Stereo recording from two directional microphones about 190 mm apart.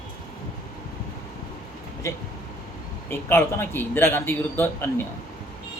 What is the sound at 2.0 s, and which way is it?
A man's voice, 15° left (ahead or behind).